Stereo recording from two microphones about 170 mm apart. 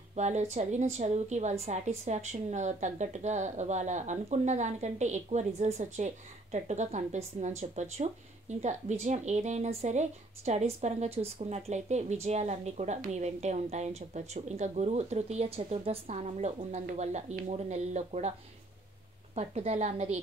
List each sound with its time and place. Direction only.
0.1 s a woman's voice: 40° right (ahead or behind)
19.3 s speech: 40° right (ahead or behind)